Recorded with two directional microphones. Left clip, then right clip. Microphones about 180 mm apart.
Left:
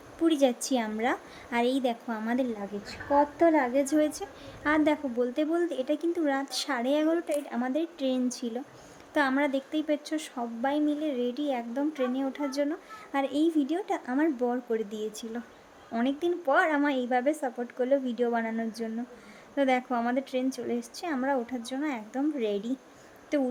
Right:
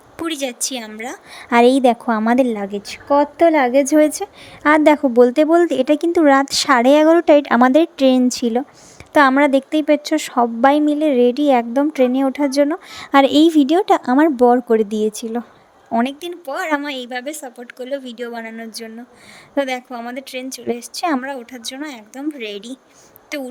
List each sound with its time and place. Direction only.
0.2 s a woman's voice: 45° right (ahead or behind)